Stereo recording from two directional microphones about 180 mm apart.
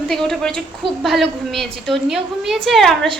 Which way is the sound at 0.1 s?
Centre (ahead or behind).